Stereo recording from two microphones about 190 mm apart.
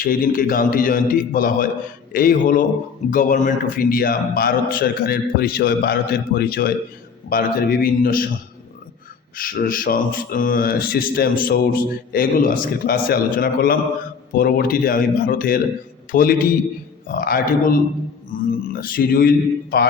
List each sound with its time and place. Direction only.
0.0 s speech: 45° left (ahead or behind)
9.3 s a man's voice: 50° left (ahead or behind)